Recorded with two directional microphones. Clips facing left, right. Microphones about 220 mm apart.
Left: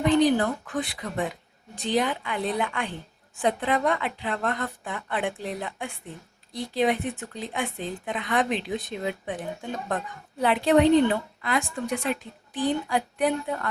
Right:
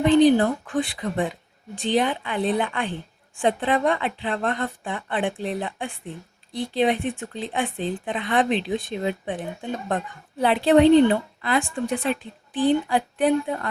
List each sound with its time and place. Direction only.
0.0 s a woman's voice: 25° right (ahead or behind)
10.4 s a woman's voice: 30° right (ahead or behind)